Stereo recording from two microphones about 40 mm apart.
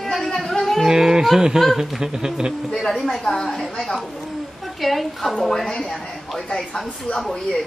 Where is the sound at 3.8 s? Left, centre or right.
Centre.